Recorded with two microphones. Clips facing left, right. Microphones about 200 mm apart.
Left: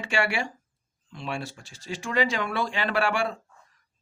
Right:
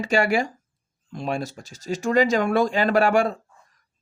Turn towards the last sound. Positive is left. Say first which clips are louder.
# right 7 dB
turn(degrees=-40)  # may be behind; listen again after turning